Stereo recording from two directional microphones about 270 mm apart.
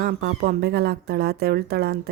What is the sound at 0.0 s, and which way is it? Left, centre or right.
Speech, right.